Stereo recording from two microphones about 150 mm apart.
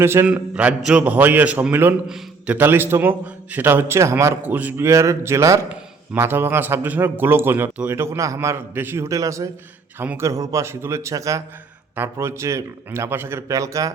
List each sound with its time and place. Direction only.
0.0 s a man's voice: 15° right (ahead or behind)